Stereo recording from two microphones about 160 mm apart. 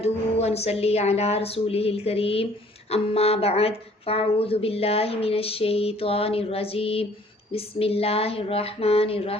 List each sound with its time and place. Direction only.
0.0 s a woman's voice: 40° left (ahead or behind)